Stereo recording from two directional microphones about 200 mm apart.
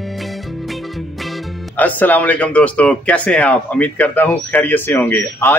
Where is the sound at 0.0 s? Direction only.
Centre (ahead or behind).